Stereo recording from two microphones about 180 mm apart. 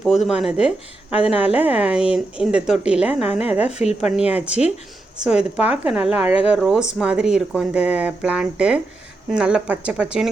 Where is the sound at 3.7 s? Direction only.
35° left (ahead or behind).